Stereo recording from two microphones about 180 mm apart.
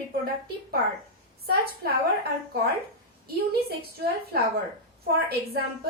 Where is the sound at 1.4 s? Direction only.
60° right (ahead or behind).